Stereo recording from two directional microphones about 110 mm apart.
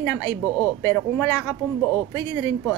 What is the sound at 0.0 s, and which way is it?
Speech, 25° left (ahead or behind).